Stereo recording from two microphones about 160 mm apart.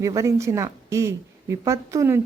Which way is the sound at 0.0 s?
20° right (ahead or behind).